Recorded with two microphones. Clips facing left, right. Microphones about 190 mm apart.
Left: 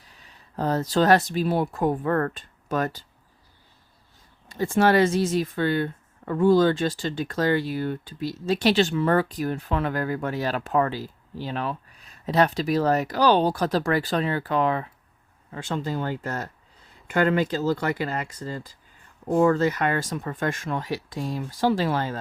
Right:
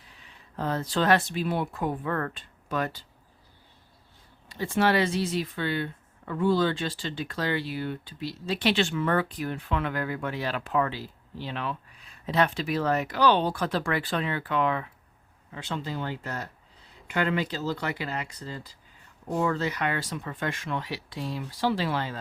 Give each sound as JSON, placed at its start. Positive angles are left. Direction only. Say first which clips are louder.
{"t": 0.1, "sound": "speech", "louder": "left 2 dB", "side_deg": 40}
{"t": 4.4, "sound": "speech", "louder": "left 4 dB", "side_deg": 45}